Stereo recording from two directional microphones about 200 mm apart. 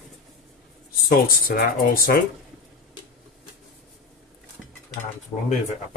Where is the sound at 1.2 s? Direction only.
45° left (ahead or behind).